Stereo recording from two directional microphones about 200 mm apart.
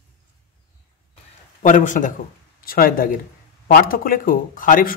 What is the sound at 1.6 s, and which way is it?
A man's voice, 40° left (ahead or behind).